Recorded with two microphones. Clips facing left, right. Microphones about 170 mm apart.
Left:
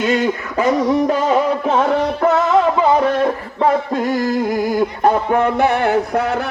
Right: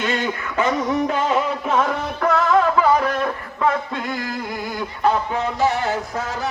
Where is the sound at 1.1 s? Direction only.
35° left (ahead or behind).